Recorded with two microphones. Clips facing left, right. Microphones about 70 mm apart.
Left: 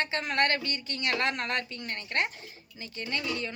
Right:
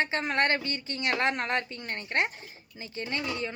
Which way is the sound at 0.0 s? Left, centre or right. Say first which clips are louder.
Right 1 dB; right.